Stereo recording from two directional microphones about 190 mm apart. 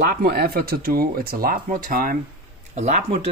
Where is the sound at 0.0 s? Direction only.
55° right (ahead or behind).